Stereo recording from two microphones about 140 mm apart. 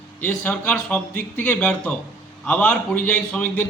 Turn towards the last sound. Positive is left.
turn(degrees=10)  # may be behind; listen again after turning